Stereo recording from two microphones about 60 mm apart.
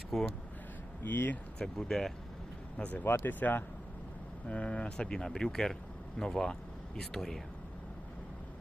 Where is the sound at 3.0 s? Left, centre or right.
Left.